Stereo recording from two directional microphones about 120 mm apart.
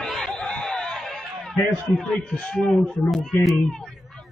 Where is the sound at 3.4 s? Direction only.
Centre (ahead or behind).